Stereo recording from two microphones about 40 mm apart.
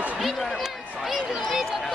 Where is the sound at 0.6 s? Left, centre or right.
Centre.